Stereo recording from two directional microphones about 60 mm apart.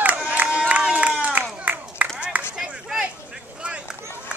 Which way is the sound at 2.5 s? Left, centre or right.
Centre.